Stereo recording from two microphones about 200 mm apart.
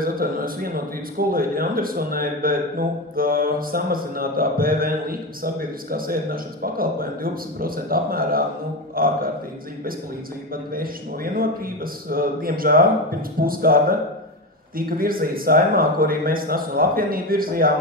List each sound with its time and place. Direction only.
0.0 s a man's voice: 45° right (ahead or behind)
10.5 s speech: 45° right (ahead or behind)